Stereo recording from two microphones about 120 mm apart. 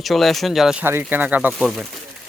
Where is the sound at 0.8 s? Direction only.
20° right (ahead or behind).